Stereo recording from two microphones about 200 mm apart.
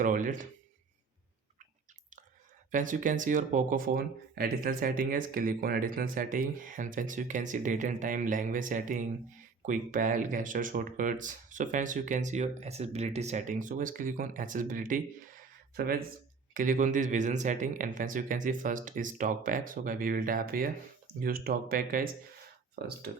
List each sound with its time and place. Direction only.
0.0 s speech: 40° right (ahead or behind)
2.7 s speech: 40° right (ahead or behind)